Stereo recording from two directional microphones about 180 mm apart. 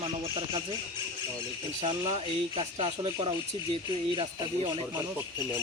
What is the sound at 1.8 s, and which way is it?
Speech, 35° right (ahead or behind).